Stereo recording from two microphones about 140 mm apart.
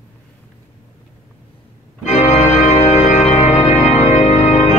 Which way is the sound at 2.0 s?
50° left (ahead or behind).